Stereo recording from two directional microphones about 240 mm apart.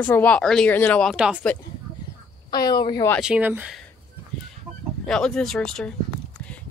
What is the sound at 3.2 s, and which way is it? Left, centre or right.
Speech, centre.